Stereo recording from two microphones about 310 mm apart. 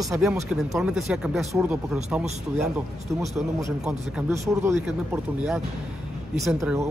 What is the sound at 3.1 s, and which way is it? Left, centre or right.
A man's voice, centre.